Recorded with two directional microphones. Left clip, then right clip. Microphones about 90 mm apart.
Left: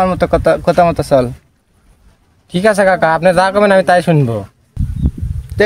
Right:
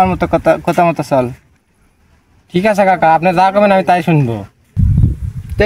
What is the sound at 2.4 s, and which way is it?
A man's voice, 50° left (ahead or behind).